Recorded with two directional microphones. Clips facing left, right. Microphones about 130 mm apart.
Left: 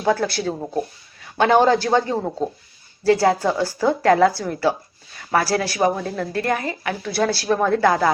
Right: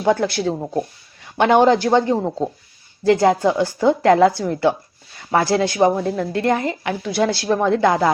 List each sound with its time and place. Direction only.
0.0 s a woman's voice: 20° right (ahead or behind)